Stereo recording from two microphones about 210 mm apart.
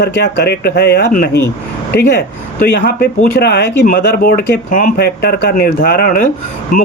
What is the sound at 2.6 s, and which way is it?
Speech, 50° left (ahead or behind).